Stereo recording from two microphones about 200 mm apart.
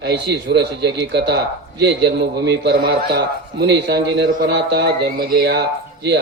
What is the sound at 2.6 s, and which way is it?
Speech, 50° right (ahead or behind).